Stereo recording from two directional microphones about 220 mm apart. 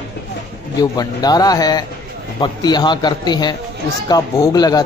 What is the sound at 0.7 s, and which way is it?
A man's voice, 15° left (ahead or behind).